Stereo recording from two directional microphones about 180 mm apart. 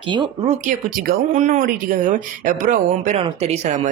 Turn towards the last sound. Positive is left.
turn(degrees=-35)  # may be behind; listen again after turning